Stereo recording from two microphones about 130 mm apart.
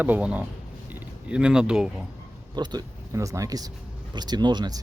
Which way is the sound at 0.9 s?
10° right (ahead or behind).